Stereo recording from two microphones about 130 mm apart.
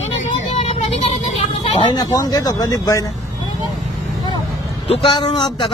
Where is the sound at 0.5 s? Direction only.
55° left (ahead or behind).